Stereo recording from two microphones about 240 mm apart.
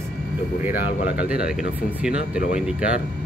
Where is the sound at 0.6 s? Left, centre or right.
Centre.